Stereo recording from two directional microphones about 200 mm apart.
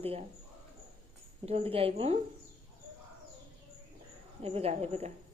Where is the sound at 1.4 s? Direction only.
30° right (ahead or behind).